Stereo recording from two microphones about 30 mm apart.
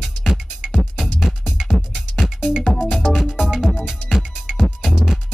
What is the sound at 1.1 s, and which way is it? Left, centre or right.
Music, centre.